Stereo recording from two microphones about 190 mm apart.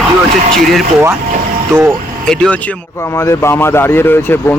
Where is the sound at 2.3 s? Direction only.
5° left (ahead or behind).